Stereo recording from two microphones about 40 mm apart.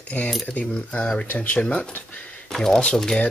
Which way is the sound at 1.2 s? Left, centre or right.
Left.